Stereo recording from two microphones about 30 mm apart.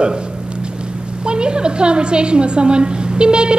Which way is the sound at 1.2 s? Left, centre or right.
Right.